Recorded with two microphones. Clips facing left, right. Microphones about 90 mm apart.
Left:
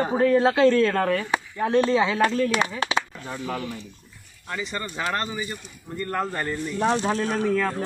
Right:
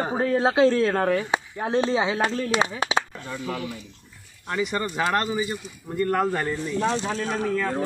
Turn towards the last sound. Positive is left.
turn(degrees=-15)  # may be behind; listen again after turning